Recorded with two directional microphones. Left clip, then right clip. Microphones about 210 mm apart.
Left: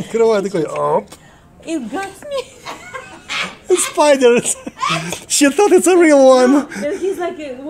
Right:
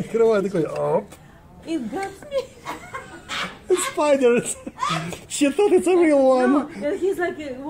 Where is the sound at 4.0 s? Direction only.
30° left (ahead or behind); by 6.8 s 50° left (ahead or behind).